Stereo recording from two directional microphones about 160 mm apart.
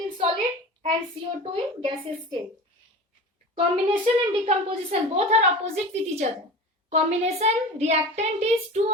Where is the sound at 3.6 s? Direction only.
35° right (ahead or behind).